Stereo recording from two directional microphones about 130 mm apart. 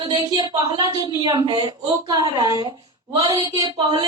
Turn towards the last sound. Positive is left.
turn(degrees=-35)  # may be behind; listen again after turning